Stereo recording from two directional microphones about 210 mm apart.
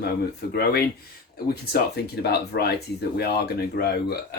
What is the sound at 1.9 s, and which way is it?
Speech, 50° left (ahead or behind).